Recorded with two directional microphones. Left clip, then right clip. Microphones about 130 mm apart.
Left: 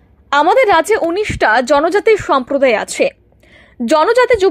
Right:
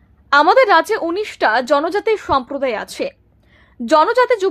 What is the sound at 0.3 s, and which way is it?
A woman's voice, 15° left (ahead or behind).